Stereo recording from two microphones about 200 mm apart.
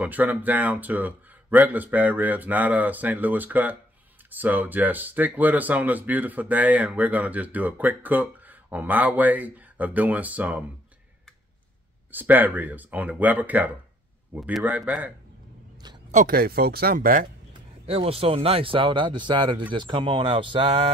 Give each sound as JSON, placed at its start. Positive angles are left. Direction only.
{"t": 0.0, "sound": "speech", "side_deg": -10}
{"t": 12.1, "sound": "speech", "side_deg": -10}
{"t": 16.1, "sound": "speech", "side_deg": -40}
{"t": 17.8, "sound": "speech", "side_deg": -30}